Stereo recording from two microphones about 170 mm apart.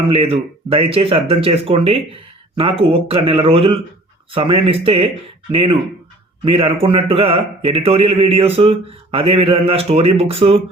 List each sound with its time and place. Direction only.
0.1 s a man's voice: 35° right (ahead or behind)